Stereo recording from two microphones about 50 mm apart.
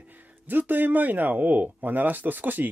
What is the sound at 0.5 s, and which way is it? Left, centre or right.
Speech, right.